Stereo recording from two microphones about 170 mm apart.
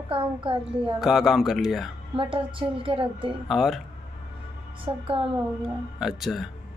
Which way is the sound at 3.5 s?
Centre (ahead or behind).